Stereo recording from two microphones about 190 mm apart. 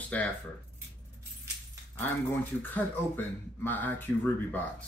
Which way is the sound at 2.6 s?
10° left (ahead or behind).